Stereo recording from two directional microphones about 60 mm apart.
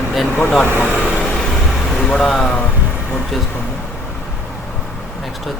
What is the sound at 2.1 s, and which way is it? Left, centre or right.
Speech, centre.